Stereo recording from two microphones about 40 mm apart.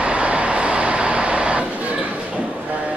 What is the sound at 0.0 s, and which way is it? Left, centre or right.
Vehicle, right.